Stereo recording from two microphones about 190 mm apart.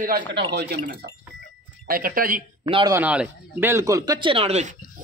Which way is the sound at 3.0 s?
5° right (ahead or behind).